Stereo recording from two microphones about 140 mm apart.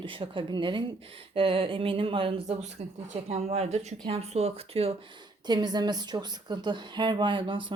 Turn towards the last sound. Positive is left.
turn(degrees=-35)  # may be behind; listen again after turning